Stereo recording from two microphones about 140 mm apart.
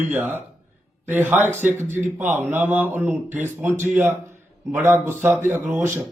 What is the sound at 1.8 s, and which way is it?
Speech, 60° right (ahead or behind).